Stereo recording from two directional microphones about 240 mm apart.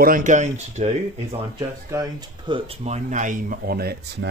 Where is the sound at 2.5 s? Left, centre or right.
Right.